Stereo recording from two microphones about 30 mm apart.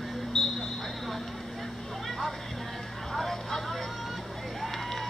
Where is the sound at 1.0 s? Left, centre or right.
Centre.